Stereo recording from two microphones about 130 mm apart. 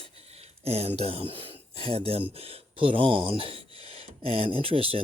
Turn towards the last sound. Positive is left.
turn(degrees=-45)  # may be behind; listen again after turning